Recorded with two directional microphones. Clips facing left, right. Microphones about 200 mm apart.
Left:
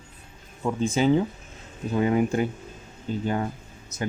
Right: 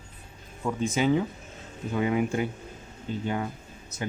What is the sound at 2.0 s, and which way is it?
Speech, 40° left (ahead or behind).